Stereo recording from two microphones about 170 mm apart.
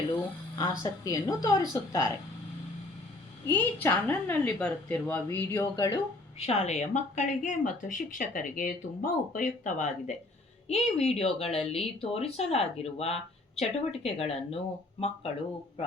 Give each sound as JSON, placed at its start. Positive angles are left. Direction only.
{"t": 0.6, "sound": "a woman's voice", "side_deg": 20}
{"t": 3.4, "sound": "a woman's voice", "side_deg": 10}
{"t": 6.4, "sound": "speech", "side_deg": 40}